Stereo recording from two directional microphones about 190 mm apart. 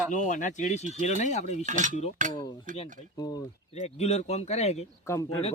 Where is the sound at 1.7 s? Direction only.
40° right (ahead or behind).